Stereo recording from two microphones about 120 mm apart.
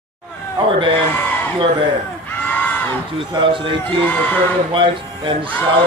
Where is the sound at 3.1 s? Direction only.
45° right (ahead or behind).